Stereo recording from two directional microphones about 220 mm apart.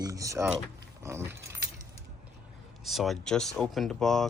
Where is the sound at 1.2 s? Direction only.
50° right (ahead or behind).